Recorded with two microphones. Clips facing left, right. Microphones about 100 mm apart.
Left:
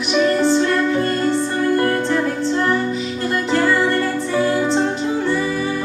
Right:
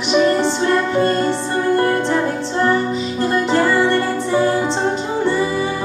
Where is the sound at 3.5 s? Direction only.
30° right (ahead or behind).